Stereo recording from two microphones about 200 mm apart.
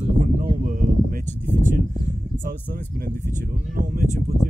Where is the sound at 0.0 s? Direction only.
40° right (ahead or behind).